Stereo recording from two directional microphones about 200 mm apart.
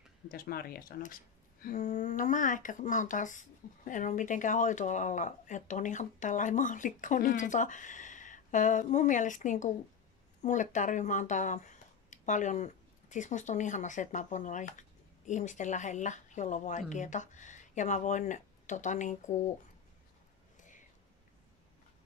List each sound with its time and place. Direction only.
0.3 s speech: 50° left (ahead or behind)
20.5 s whispering: 40° left (ahead or behind)